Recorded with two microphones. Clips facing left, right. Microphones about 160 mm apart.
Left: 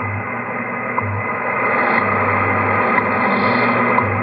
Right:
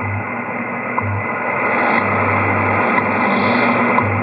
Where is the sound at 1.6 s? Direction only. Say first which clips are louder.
Right 1 dB; 20° right (ahead or behind).